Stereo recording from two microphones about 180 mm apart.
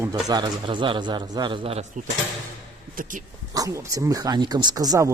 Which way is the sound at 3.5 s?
20° right (ahead or behind).